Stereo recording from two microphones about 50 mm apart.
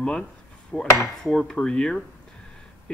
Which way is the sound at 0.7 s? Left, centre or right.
Left.